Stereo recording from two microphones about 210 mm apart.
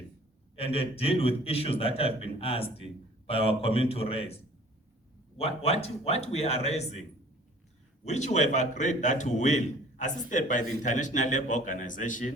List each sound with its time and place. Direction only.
0.5 s a man's voice: 25° left (ahead or behind)
5.4 s a man's voice: 30° left (ahead or behind)
8.0 s a man's voice: 35° left (ahead or behind)